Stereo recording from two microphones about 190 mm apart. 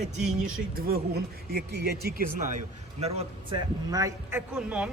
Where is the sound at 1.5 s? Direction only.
55° right (ahead or behind); by 3.6 s 35° right (ahead or behind).